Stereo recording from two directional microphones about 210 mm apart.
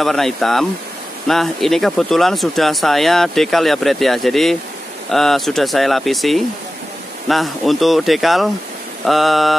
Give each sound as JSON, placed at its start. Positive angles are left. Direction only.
{"t": 0.0, "sound": "speech", "side_deg": 0}